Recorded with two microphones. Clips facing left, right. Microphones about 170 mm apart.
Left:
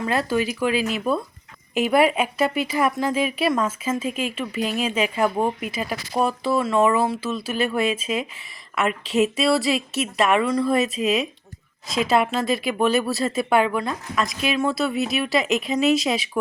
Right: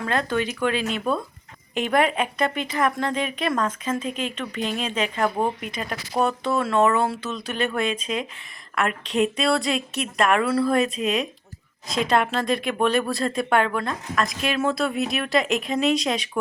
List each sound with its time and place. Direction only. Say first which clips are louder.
0.0 s a woman's voice: left 2 dB; 5° left (ahead or behind)